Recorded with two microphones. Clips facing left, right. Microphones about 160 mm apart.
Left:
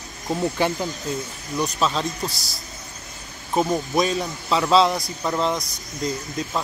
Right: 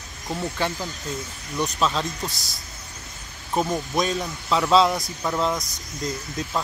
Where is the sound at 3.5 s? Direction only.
10° left (ahead or behind).